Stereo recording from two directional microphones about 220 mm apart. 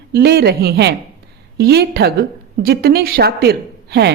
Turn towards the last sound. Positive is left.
turn(degrees=-50)  # may be behind; listen again after turning